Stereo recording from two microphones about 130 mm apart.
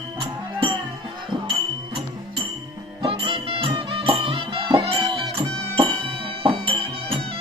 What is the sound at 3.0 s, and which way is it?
Music, 45° right (ahead or behind).